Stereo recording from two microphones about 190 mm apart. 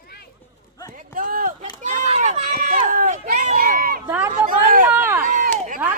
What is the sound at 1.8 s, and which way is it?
Run, 40° right (ahead or behind).